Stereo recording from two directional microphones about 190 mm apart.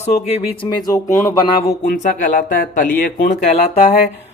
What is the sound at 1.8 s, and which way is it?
Speech, 40° left (ahead or behind).